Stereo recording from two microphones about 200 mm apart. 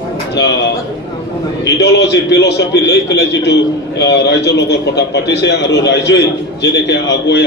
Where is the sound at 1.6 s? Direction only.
60° left (ahead or behind).